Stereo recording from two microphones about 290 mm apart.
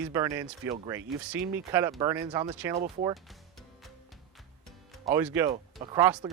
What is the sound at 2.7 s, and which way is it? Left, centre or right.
Speech, right.